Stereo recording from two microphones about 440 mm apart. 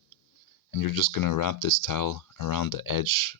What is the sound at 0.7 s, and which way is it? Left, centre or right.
Speech, left.